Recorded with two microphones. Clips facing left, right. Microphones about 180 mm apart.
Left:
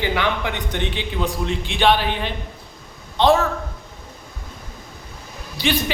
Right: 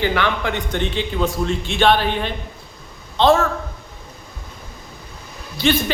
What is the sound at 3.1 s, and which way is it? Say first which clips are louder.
Speech: right 1 dB; 15° left (ahead or behind).